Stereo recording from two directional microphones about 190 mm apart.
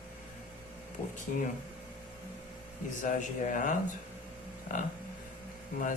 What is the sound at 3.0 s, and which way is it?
Speech, 45° left (ahead or behind).